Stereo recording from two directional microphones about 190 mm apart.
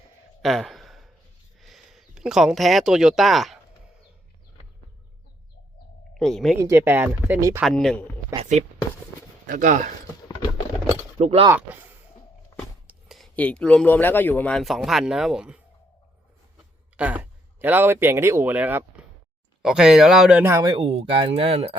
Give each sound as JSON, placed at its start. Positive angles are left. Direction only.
{"t": 0.4, "sound": "a sound", "side_deg": 0}
{"t": 1.5, "sound": "speech", "side_deg": 0}
{"t": 6.1, "sound": "speech", "side_deg": 0}
{"t": 6.6, "sound": "speech", "side_deg": -15}
{"t": 7.6, "sound": "speech", "side_deg": 0}
{"t": 8.3, "sound": "speech", "side_deg": -20}
{"t": 9.5, "sound": "speech", "side_deg": -45}
{"t": 11.2, "sound": "speech", "side_deg": -35}
{"t": 11.5, "sound": "speech", "side_deg": -10}
{"t": 12.9, "sound": "speech", "side_deg": 0}
{"t": 17.0, "sound": "speech", "side_deg": -10}